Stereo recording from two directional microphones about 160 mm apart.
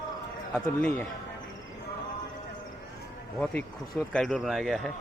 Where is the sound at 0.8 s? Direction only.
10° left (ahead or behind).